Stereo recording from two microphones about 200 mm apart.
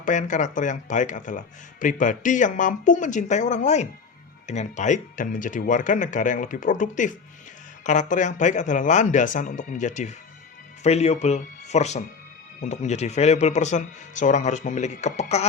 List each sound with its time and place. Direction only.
0.0 s speech: 40° left (ahead or behind)